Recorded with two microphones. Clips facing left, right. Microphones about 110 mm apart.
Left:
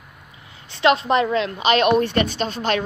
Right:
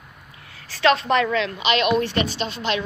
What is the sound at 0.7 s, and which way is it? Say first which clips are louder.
A woman's voice: left 1 dB; 25° left (ahead or behind).